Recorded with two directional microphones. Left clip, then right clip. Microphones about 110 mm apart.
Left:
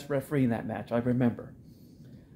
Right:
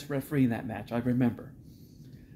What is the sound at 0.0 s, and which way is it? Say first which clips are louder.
Speech: left 1 dB; 35° left (ahead or behind).